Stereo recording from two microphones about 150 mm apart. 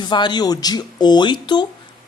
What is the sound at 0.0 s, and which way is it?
Speech, 30° left (ahead or behind).